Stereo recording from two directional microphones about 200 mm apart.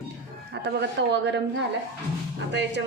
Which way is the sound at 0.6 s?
60° right (ahead or behind).